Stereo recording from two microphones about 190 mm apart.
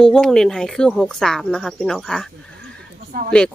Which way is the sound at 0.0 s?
5° left (ahead or behind).